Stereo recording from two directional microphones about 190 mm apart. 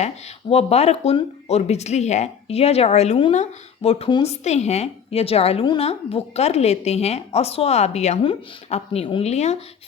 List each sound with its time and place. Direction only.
0.5 s speech: 35° left (ahead or behind)